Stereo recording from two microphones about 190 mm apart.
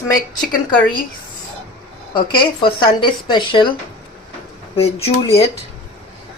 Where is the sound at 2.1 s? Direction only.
25° left (ahead or behind).